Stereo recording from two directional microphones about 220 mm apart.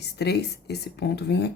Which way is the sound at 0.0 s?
50° left (ahead or behind).